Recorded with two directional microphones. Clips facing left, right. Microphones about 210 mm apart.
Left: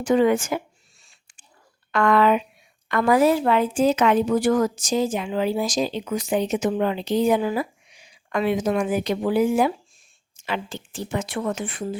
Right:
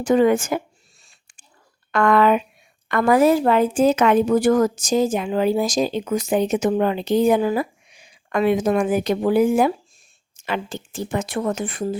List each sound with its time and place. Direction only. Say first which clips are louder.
0.0 s speech: right 2 dB; 45° right (ahead or behind)
1.9 s speech: right 2 dB; 50° right (ahead or behind)